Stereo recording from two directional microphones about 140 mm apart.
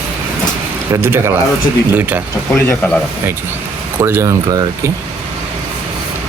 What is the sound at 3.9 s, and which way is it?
Speech, 15° right (ahead or behind).